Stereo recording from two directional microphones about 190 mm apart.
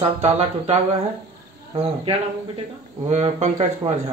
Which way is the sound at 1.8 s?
30° right (ahead or behind).